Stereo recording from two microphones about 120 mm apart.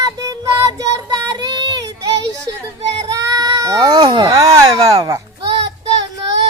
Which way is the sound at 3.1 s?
30° right (ahead or behind).